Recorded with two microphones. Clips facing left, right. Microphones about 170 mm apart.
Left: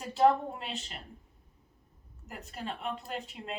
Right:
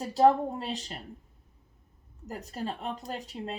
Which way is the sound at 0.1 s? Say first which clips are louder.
Right 3 dB; 40° right (ahead or behind).